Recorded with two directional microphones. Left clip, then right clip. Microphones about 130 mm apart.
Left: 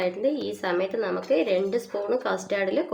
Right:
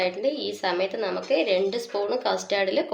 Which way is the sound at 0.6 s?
90° left.